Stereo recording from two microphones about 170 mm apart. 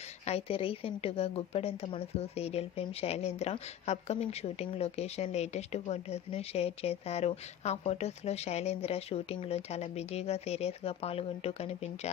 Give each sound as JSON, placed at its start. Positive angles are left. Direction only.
{"t": 0.3, "sound": "a woman's voice", "side_deg": 35}